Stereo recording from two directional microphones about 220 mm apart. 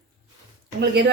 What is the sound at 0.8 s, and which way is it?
Speech, 50° right (ahead or behind).